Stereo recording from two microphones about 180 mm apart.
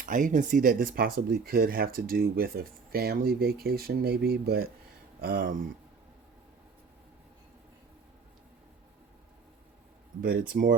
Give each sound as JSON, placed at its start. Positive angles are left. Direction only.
{"t": 0.0, "sound": "speech", "side_deg": -45}
{"t": 10.2, "sound": "speech", "side_deg": -55}